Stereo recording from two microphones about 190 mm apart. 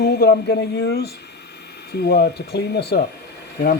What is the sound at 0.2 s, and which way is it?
Speech, 60° left (ahead or behind).